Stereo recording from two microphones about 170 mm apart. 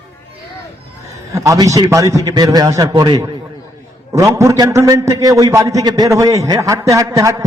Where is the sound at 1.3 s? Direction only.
20° right (ahead or behind).